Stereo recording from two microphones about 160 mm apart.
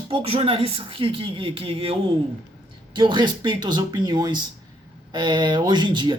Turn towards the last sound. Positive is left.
turn(degrees=-30)  # may be behind; listen again after turning